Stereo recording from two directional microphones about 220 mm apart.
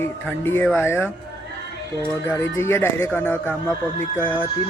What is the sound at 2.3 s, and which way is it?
Speech, 10° left (ahead or behind).